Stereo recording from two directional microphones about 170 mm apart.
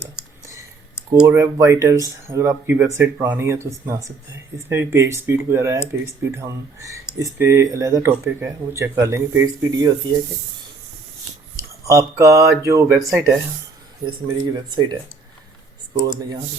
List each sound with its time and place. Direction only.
1.1 s speech: 5° right (ahead or behind)
1.4 s speech: 20° right (ahead or behind)
11.5 s speech: 20° right (ahead or behind)